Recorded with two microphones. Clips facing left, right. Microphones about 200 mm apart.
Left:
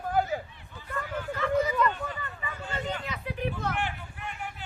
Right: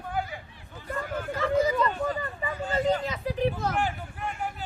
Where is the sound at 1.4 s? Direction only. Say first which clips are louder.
Right 2 dB; 35° right (ahead or behind).